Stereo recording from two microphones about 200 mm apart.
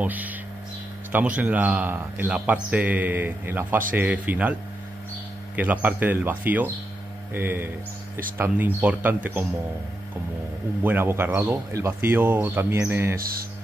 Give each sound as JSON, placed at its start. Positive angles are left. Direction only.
{"t": 0.0, "sound": "speech", "side_deg": -10}
{"t": 5.6, "sound": "speech", "side_deg": -10}
{"t": 10.8, "sound": "speech", "side_deg": -10}
{"t": 13.2, "sound": "speech", "side_deg": -45}